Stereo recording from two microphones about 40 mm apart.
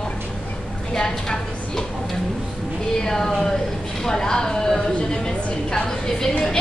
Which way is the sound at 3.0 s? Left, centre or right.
Centre.